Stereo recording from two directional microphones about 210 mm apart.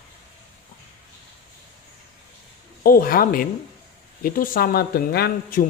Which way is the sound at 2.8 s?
45° left (ahead or behind).